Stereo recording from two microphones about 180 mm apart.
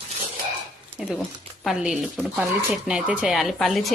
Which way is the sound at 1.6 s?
5° right (ahead or behind).